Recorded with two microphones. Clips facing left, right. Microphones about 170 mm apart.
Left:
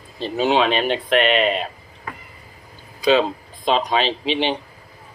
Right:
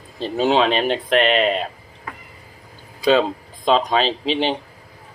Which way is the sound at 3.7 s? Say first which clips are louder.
Right 2 dB; 35° right (ahead or behind).